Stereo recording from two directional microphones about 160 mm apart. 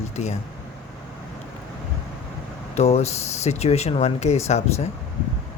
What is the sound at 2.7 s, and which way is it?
Speech, 40° left (ahead or behind).